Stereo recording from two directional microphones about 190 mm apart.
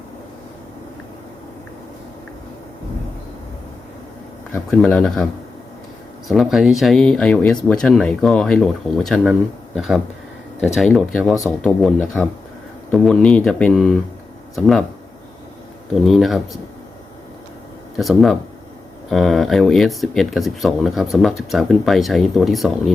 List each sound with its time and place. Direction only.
4.5 s speech: 5° left (ahead or behind)
16.0 s speech: centre (ahead or behind)
17.9 s speech: centre (ahead or behind)